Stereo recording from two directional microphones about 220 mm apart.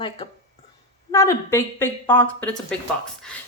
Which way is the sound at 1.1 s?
15° left (ahead or behind).